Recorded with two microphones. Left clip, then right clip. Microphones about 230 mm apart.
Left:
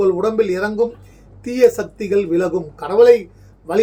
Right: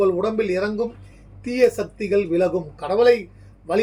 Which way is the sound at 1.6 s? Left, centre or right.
Centre.